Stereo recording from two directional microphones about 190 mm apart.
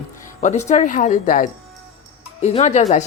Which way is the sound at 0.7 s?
40° left (ahead or behind).